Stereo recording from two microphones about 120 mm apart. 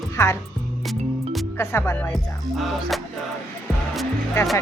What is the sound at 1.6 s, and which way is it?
Music, 20° left (ahead or behind).